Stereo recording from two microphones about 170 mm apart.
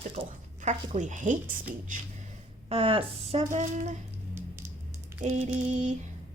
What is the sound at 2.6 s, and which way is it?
Speech, 35° right (ahead or behind).